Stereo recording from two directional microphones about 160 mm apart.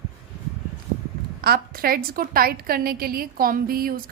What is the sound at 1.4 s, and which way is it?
A woman's voice, 65° right (ahead or behind).